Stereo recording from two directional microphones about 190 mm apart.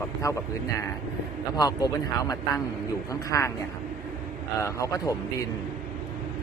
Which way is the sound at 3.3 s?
15° left (ahead or behind).